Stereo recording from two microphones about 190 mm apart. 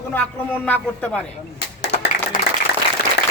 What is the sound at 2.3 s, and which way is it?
Applause, 45° left (ahead or behind).